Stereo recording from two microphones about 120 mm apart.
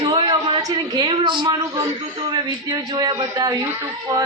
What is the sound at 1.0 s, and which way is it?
Speech, 40° right (ahead or behind).